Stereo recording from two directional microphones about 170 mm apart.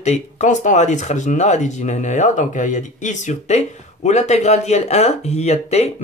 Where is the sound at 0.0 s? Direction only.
45° left (ahead or behind).